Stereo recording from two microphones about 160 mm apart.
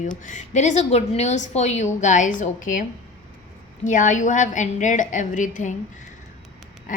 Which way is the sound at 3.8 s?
50° left (ahead or behind).